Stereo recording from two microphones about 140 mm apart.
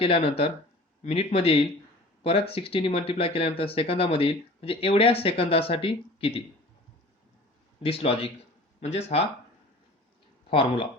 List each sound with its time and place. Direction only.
0.0 s speech: 40° left (ahead or behind)
7.8 s speech: 45° left (ahead or behind)
10.5 s speech: 40° left (ahead or behind)